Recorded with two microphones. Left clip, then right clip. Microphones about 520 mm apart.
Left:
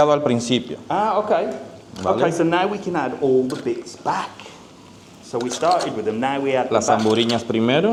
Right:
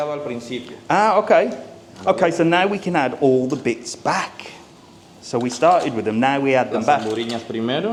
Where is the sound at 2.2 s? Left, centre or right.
Right.